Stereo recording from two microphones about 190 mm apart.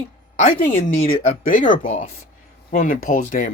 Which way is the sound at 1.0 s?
45° left (ahead or behind).